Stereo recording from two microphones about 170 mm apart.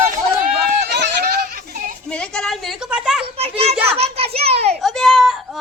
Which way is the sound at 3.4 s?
35° right (ahead or behind).